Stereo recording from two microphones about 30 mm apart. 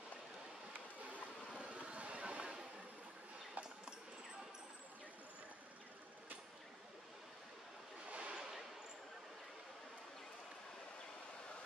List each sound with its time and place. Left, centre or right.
1.7 s vehicle: right
3.6 s clip-clop: right
8.1 s a sound: right